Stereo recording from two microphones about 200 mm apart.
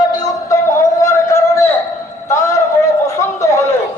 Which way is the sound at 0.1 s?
15° left (ahead or behind).